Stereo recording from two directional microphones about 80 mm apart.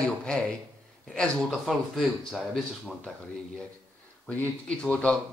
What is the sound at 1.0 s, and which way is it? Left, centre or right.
Speech, centre.